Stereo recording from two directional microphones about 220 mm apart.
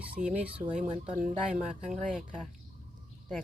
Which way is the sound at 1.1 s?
35° right (ahead or behind).